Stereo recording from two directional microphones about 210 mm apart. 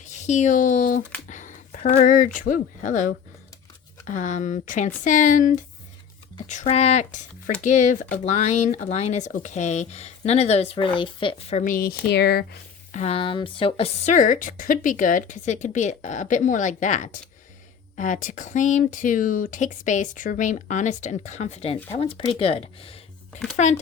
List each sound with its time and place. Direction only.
0.0 s speech: 35° left (ahead or behind); by 12.5 s 50° left (ahead or behind)
12.9 s speech: 30° left (ahead or behind)